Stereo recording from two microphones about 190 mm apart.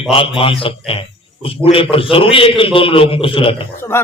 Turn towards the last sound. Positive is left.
turn(degrees=15)  # may be behind; listen again after turning